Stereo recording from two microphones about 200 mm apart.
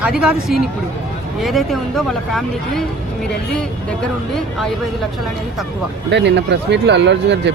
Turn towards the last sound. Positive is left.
turn(degrees=-60)  # may be behind; listen again after turning